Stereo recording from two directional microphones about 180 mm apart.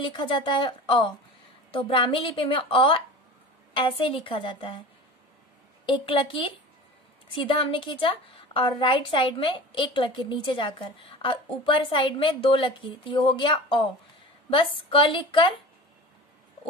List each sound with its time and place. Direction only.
0.0 s a woman's voice: 25° left (ahead or behind)
5.9 s a woman's voice: 30° left (ahead or behind)